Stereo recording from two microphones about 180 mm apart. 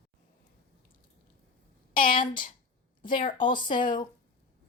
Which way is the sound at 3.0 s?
50° left (ahead or behind).